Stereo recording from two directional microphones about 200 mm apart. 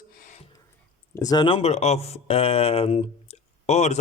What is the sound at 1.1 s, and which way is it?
Speech, 20° left (ahead or behind).